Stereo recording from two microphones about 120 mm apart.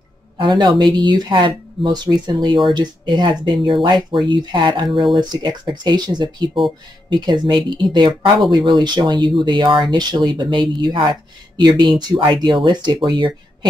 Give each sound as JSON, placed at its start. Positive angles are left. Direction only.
{"t": 0.4, "sound": "speech", "side_deg": -40}